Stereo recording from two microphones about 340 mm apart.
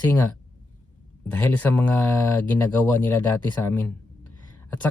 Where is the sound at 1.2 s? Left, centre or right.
Centre.